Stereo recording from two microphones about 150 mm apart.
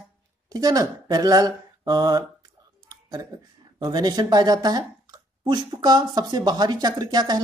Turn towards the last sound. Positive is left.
turn(degrees=-25)  # may be behind; listen again after turning